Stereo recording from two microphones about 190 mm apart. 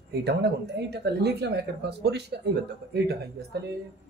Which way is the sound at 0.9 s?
60° right (ahead or behind).